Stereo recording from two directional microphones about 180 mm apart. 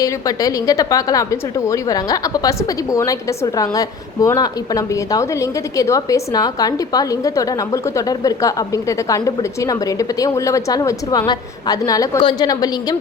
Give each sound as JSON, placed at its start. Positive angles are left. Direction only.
{"t": 0.0, "sound": "a woman's voice", "side_deg": 20}